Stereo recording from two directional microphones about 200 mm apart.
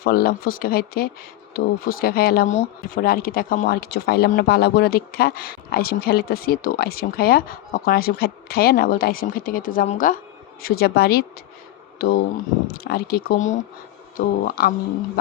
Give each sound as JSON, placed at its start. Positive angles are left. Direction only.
{"t": 0.0, "sound": "speech", "side_deg": 50}
{"t": 10.6, "sound": "speech", "side_deg": 50}